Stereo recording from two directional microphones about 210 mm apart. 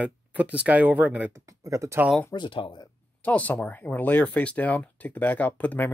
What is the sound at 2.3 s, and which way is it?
Speech, 25° left (ahead or behind).